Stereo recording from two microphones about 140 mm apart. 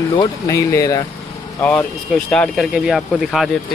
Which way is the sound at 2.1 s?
Centre (ahead or behind).